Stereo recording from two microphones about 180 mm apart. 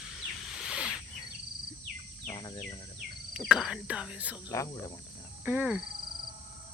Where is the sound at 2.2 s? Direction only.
20° left (ahead or behind).